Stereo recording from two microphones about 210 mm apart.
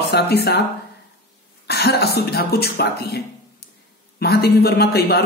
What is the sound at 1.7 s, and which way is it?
Speech, 50° left (ahead or behind).